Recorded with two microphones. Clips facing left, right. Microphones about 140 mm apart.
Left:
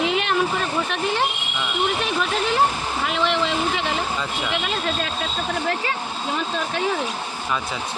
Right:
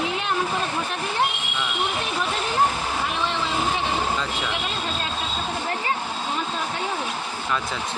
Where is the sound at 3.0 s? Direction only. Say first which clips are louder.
Left 7 dB; 90° left.